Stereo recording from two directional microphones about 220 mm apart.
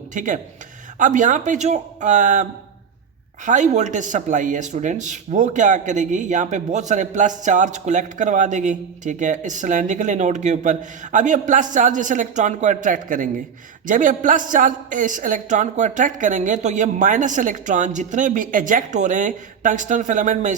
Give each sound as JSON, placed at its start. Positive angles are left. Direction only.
{"t": 0.1, "sound": "speech", "side_deg": -35}